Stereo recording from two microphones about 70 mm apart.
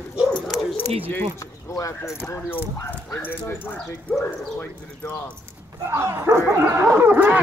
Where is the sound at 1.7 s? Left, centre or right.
Left.